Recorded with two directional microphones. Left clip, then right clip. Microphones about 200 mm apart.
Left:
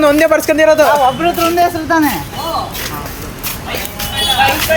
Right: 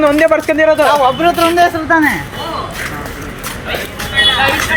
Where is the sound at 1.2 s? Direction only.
55° right (ahead or behind).